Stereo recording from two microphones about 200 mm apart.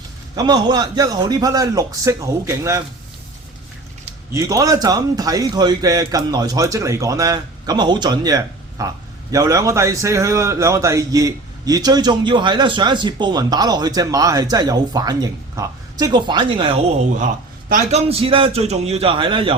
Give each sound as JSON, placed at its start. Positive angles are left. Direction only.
{"t": 0.3, "sound": "a man's voice", "side_deg": -20}
{"t": 4.4, "sound": "a man's voice", "side_deg": -15}
{"t": 17.7, "sound": "a man's voice", "side_deg": -35}